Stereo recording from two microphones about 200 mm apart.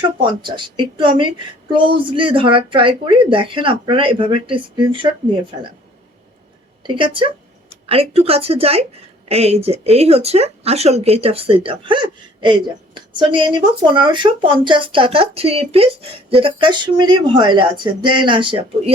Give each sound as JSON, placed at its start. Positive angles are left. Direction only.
{"t": 0.2, "sound": "a woman's voice", "side_deg": -25}
{"t": 6.8, "sound": "a woman's voice", "side_deg": -25}